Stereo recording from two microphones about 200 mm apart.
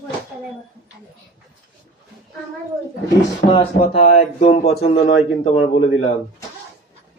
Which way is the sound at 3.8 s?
40° left (ahead or behind).